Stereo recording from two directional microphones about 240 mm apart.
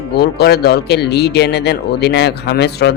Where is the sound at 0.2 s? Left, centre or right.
Left.